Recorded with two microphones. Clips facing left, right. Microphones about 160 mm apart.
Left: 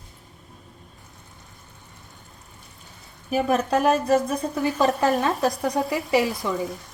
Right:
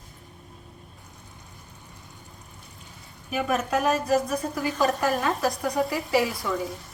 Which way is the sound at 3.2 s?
30° left (ahead or behind).